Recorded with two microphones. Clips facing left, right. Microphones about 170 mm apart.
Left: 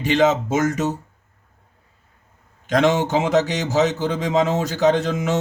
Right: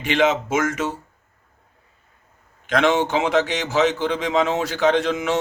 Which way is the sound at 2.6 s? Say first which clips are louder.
Left 1 dB; 40° left (ahead or behind).